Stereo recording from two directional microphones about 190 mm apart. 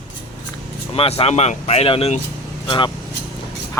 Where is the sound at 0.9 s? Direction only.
30° left (ahead or behind).